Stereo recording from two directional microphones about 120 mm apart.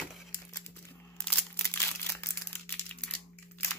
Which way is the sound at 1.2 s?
10° left (ahead or behind).